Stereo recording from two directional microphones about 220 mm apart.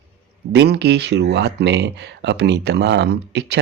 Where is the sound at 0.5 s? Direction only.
50° right (ahead or behind).